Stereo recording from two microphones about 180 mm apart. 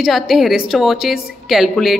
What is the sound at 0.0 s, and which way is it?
A woman's voice, centre (ahead or behind).